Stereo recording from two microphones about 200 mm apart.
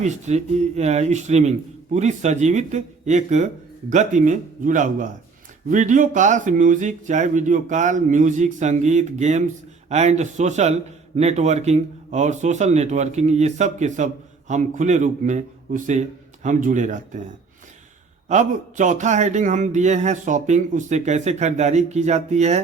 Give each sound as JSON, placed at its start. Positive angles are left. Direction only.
{"t": 0.0, "sound": "speech", "side_deg": -35}
{"t": 18.3, "sound": "speech", "side_deg": -35}